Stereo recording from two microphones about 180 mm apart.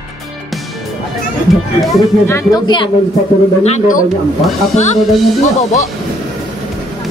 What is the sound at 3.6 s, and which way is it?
A man's voice, 40° left (ahead or behind).